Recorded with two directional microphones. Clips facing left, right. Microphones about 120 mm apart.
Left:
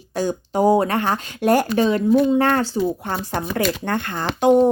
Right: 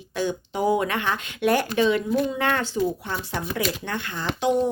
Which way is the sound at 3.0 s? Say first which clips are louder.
Left 5 dB; 55° left (ahead or behind).